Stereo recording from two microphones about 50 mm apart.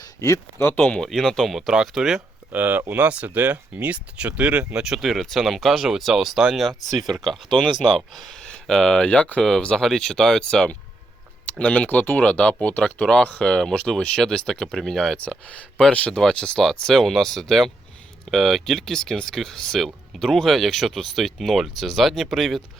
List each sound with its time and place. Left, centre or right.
0.2 s speech: left
0.8 s speech: centre
1.5 s speech: centre
2.5 s speech: right
3.0 s speech: right
4.7 s speech: centre
4.9 s speech: centre
9.0 s speech: left
9.8 s speech: centre
16.6 s speech: centre